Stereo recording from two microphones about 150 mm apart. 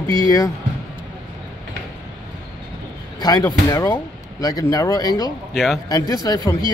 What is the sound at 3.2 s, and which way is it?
Speech, 25° left (ahead or behind).